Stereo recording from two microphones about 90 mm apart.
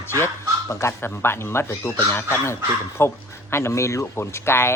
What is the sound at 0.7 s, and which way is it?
Speech, 30° left (ahead or behind).